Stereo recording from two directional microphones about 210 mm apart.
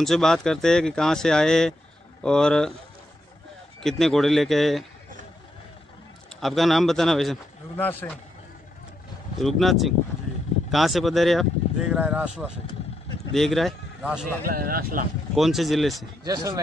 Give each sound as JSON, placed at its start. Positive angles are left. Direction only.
{"t": 0.0, "sound": "speech", "side_deg": 0}
{"t": 3.8, "sound": "speech", "side_deg": 0}
{"t": 6.4, "sound": "speech", "side_deg": 0}
{"t": 9.4, "sound": "speech", "side_deg": 0}
{"t": 13.3, "sound": "speech", "side_deg": 0}
{"t": 14.4, "sound": "speech", "side_deg": -45}
{"t": 15.3, "sound": "speech", "side_deg": 0}
{"t": 16.3, "sound": "speech", "side_deg": -15}